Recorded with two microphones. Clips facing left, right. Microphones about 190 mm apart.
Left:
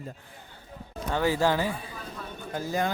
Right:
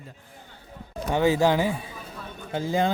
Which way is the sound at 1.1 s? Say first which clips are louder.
Right 4 dB; 20° right (ahead or behind).